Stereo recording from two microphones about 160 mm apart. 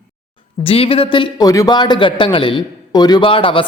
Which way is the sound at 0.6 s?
35° left (ahead or behind).